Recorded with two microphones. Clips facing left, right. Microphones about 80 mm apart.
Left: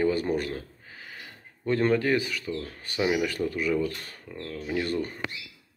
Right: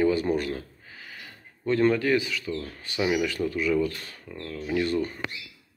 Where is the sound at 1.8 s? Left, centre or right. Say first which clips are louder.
Right 1 dB; left.